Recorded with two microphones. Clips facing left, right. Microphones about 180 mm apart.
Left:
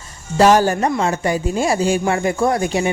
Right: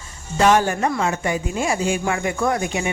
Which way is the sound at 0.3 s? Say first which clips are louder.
Left 4 dB; 35° left (ahead or behind).